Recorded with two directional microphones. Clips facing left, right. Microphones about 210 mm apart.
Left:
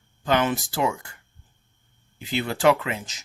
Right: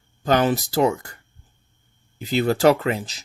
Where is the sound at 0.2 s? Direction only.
40° right (ahead or behind).